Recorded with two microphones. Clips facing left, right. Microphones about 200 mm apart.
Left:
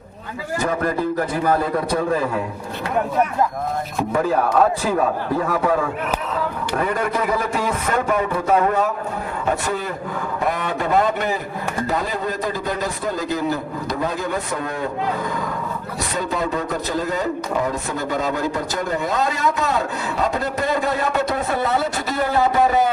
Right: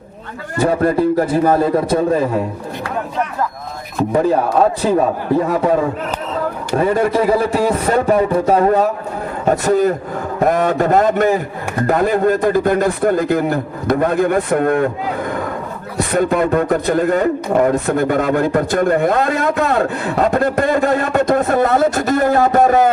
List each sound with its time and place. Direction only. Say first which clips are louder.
0.6 s a man's voice: right 8 dB; 35° right (ahead or behind)
4.8 s a man's voice: right 5 dB; 20° right (ahead or behind); by 14.8 s 55° right (ahead or behind)
16.1 s a man's voice: right 9 dB; 55° right (ahead or behind)